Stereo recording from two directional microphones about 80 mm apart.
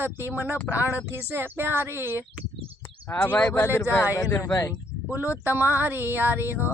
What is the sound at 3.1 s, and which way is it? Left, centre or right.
Speech, left.